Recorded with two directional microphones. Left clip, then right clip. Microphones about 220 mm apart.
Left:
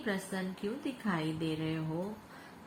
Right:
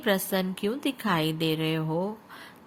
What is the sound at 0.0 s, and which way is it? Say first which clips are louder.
Speech: right 11 dB; 50° right (ahead or behind).